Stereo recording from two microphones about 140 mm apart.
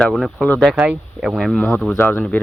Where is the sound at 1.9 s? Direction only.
15° left (ahead or behind).